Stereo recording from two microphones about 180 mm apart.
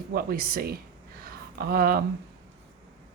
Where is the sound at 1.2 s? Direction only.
55° right (ahead or behind).